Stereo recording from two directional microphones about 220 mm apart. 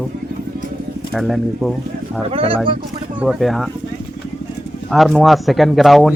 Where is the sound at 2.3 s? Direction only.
25° right (ahead or behind).